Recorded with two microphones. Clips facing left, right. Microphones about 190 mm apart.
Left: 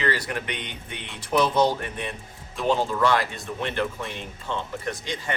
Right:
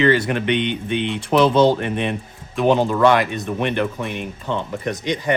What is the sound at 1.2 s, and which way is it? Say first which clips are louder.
Speech: right 6 dB; 70° right (ahead or behind).